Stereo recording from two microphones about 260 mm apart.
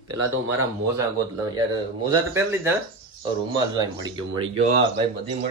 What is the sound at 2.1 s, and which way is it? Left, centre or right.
Speech, centre.